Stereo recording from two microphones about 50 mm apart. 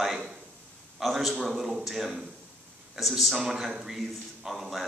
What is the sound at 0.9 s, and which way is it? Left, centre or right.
A man's voice, centre.